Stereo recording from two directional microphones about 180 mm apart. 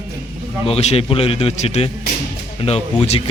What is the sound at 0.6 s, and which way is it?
A man's voice, 35° left (ahead or behind).